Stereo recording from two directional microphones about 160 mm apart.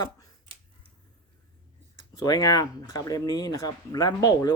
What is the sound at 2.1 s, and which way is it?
Speech, 25° left (ahead or behind).